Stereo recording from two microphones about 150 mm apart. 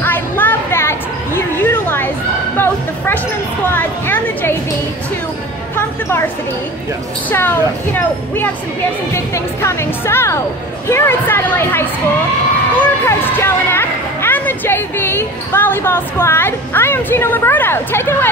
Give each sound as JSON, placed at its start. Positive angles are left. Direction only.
{"t": 0.0, "sound": "a sound", "side_deg": 10}
{"t": 2.5, "sound": "music", "side_deg": 15}
{"t": 6.0, "sound": "speech", "side_deg": 15}
{"t": 13.0, "sound": "speech", "side_deg": 15}